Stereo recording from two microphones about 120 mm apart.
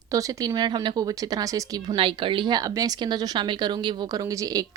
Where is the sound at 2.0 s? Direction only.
45° right (ahead or behind).